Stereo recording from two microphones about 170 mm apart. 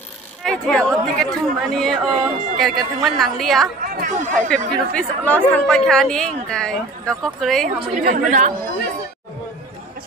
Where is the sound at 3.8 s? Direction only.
50° right (ahead or behind).